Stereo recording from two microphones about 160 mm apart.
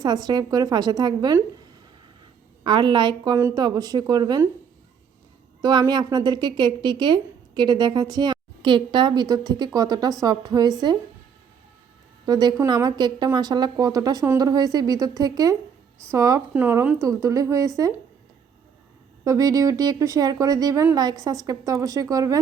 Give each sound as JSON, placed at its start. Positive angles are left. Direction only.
{"t": 0.0, "sound": "a woman's voice", "side_deg": -25}
{"t": 2.6, "sound": "a woman's voice", "side_deg": -30}
{"t": 5.9, "sound": "a woman's voice", "side_deg": -25}
{"t": 12.2, "sound": "a woman's voice", "side_deg": -25}
{"t": 19.2, "sound": "a woman's voice", "side_deg": -20}